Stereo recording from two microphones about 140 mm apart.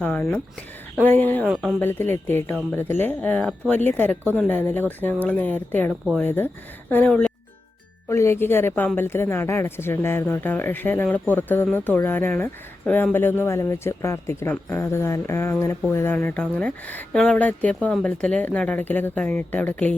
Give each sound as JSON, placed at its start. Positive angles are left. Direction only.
{"t": 0.0, "sound": "speech", "side_deg": 10}
{"t": 8.1, "sound": "speech", "side_deg": 20}